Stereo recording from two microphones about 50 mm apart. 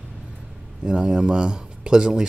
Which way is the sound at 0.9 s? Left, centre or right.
Centre.